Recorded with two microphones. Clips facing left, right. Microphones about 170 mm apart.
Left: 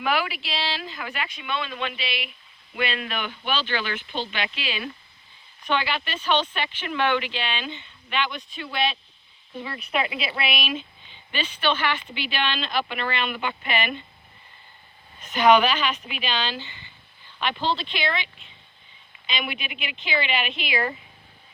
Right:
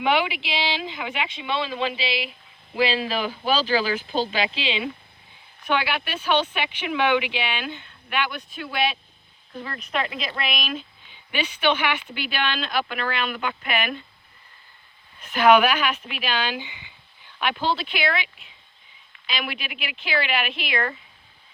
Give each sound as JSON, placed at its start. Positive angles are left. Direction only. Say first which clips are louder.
{"t": 0.0, "sound": "speech", "louder": "right 3 dB", "side_deg": -20}
{"t": 5.6, "sound": "speech", "louder": "right 1 dB", "side_deg": -10}
{"t": 9.6, "sound": "speech", "louder": "left 1 dB", "side_deg": 10}
{"t": 11.3, "sound": "speech", "louder": "right 3 dB", "side_deg": -10}
{"t": 15.3, "sound": "speech", "louder": "right 1 dB", "side_deg": -5}